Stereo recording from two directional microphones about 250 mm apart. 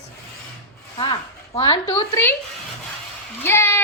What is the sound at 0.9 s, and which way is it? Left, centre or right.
Speech, left.